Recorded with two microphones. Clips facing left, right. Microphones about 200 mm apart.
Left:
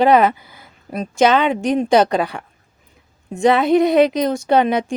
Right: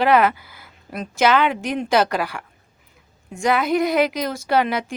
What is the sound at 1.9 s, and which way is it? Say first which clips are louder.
Speech: left 2 dB; 20° left (ahead or behind).